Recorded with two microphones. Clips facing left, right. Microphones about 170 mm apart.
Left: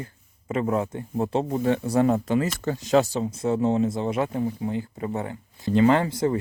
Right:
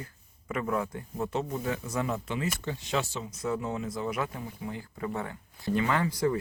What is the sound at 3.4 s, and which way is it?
Speech, 30° left (ahead or behind).